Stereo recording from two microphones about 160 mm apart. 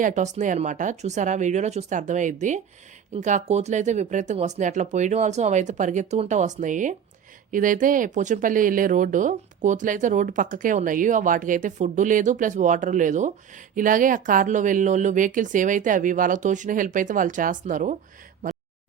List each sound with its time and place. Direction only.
0.0 s speech: 50° right (ahead or behind)